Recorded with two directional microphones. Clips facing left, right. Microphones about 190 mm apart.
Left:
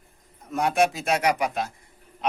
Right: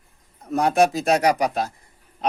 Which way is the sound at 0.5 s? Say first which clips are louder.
Right 4 dB; 35° right (ahead or behind).